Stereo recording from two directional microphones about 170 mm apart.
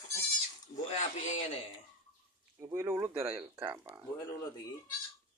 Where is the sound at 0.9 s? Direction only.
45° left (ahead or behind).